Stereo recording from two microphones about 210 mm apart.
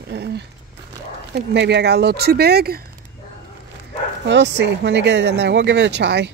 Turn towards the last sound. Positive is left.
turn(degrees=-55)  # may be behind; listen again after turning